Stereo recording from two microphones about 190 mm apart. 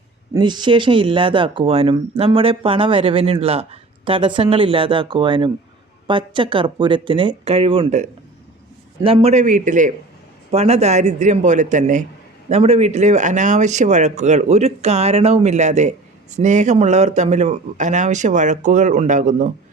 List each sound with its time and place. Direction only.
0.3 s speech: 25° right (ahead or behind); by 19.5 s 40° right (ahead or behind)